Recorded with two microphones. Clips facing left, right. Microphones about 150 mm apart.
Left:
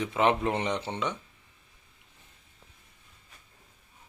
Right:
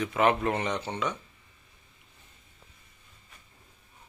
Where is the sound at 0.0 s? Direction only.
20° left (ahead or behind).